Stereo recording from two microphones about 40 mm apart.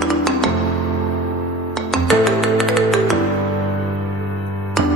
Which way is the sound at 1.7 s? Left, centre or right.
Centre.